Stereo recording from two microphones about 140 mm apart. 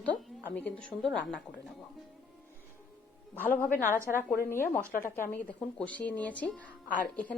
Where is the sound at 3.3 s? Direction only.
15° left (ahead or behind).